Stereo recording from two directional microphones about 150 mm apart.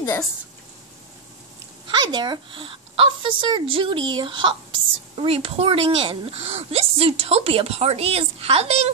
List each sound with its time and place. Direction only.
1.9 s speech: 30° right (ahead or behind)